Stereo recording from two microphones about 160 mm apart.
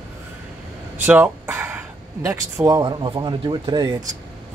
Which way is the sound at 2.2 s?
20° right (ahead or behind).